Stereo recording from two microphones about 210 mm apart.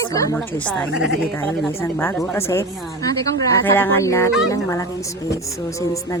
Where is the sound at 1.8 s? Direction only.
10° left (ahead or behind).